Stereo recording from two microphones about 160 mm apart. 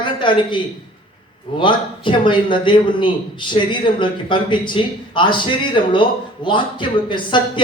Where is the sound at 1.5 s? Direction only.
30° left (ahead or behind).